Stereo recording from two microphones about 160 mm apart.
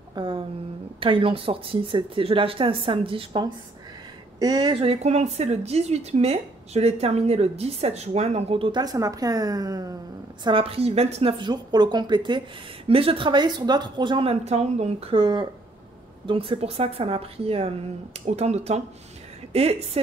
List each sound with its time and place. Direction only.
0.1 s a sound: 30° right (ahead or behind)
1.0 s a woman's voice: 35° right (ahead or behind)
4.9 s a woman's voice: 45° right (ahead or behind); by 9.9 s 25° right (ahead or behind)
10.4 s a woman's voice: 35° right (ahead or behind)